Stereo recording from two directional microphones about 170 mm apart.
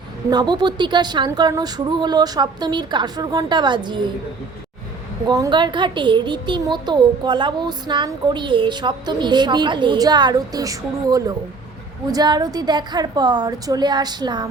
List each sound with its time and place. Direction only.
0.3 s a child's voice: 25° right (ahead or behind)
5.2 s a child's voice: 25° right (ahead or behind)